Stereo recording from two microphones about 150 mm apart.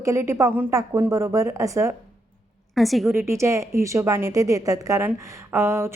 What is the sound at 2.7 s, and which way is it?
Speech, centre (ahead or behind).